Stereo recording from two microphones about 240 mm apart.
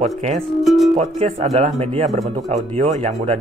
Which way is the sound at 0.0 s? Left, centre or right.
Right.